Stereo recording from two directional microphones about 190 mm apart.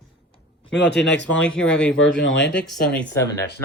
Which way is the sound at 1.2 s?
5° left (ahead or behind).